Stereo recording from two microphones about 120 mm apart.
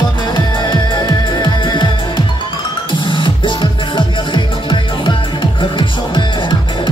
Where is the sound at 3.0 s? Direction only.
45° left (ahead or behind).